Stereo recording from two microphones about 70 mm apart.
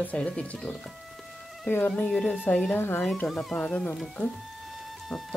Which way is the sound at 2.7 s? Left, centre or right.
Left.